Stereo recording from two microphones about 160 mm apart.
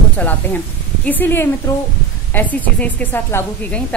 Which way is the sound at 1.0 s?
10° left (ahead or behind).